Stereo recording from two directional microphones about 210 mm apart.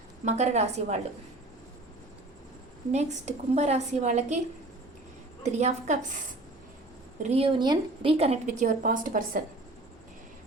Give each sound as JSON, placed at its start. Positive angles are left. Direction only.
{"t": 0.3, "sound": "a woman's voice", "side_deg": -35}
{"t": 2.9, "sound": "a woman's voice", "side_deg": -35}
{"t": 5.4, "sound": "a woman's voice", "side_deg": -35}
{"t": 7.2, "sound": "a woman's voice", "side_deg": -30}